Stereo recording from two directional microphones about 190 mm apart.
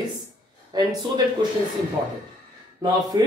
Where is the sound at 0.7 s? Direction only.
20° right (ahead or behind).